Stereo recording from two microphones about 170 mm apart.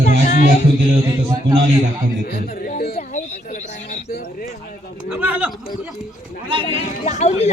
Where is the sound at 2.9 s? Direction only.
45° left (ahead or behind).